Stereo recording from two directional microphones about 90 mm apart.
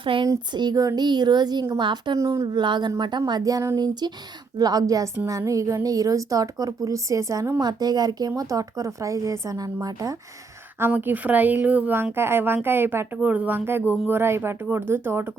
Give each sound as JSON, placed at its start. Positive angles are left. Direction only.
{"t": 0.0, "sound": "speech", "side_deg": -75}
{"t": 0.5, "sound": "a woman's voice", "side_deg": -50}
{"t": 2.1, "sound": "speech", "side_deg": -35}
{"t": 2.6, "sound": "a woman's voice", "side_deg": -55}
{"t": 3.8, "sound": "speech", "side_deg": -50}
{"t": 7.6, "sound": "speech", "side_deg": -50}
{"t": 10.8, "sound": "speech", "side_deg": -25}